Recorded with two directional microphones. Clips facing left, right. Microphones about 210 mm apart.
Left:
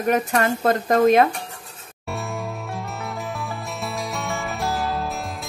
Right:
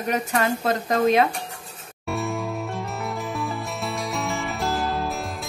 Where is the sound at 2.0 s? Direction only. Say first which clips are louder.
Right 3 dB; centre (ahead or behind).